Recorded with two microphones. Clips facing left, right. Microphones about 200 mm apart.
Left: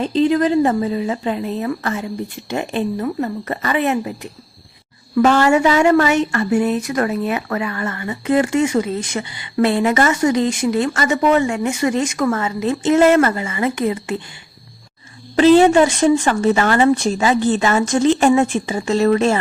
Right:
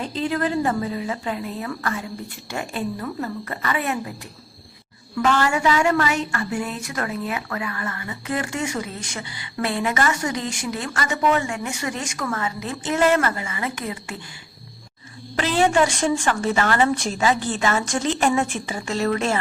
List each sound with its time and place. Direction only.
0.0 s a woman's voice: 20° left (ahead or behind)
5.1 s a woman's voice: 40° left (ahead or behind)
5.5 s a woman's voice: 25° left (ahead or behind)
15.4 s a woman's voice: 25° left (ahead or behind)